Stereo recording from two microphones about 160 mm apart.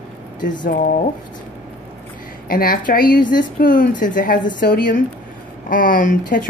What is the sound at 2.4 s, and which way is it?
A woman's voice, 65° left (ahead or behind).